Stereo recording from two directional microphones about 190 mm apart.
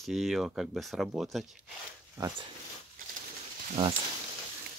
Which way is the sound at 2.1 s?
15° right (ahead or behind).